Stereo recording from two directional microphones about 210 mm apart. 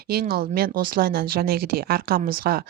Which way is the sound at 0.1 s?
45° right (ahead or behind).